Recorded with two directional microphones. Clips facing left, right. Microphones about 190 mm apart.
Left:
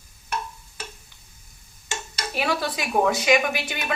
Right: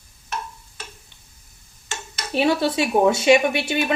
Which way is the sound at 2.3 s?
25° right (ahead or behind).